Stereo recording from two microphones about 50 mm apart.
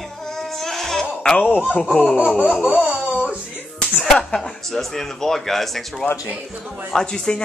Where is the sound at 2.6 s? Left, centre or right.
Right.